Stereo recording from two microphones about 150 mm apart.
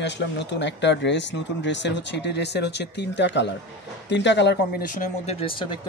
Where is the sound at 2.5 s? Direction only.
90° left.